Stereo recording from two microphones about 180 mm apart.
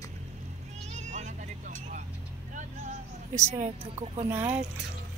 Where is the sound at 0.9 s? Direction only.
40° right (ahead or behind).